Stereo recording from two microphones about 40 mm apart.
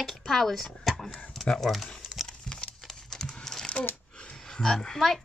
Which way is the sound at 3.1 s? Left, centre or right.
Centre.